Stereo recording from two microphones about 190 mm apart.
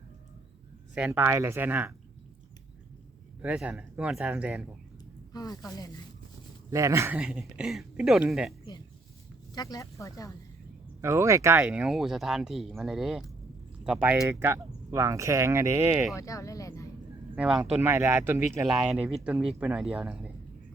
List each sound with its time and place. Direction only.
0.9 s speech: 10° right (ahead or behind)
3.4 s speech: 5° right (ahead or behind)
5.3 s speech: 20° left (ahead or behind)
6.7 s speech: 15° right (ahead or behind)
9.6 s speech: 20° left (ahead or behind)
11.0 s speech: 15° right (ahead or behind)
16.1 s speech: 15° left (ahead or behind)
17.3 s speech: 5° right (ahead or behind)